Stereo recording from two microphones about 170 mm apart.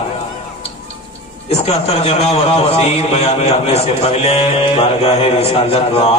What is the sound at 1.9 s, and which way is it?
A man's voice, 35° left (ahead or behind).